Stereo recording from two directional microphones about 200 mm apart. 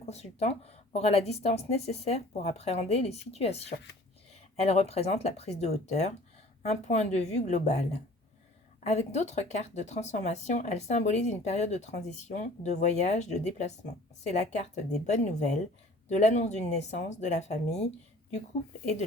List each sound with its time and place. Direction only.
0.0 s speech: 30° left (ahead or behind)